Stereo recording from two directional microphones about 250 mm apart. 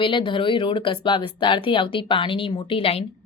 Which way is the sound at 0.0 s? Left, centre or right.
Centre.